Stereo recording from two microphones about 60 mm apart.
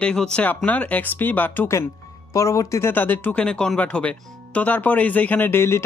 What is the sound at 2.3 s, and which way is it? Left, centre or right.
Speech, left.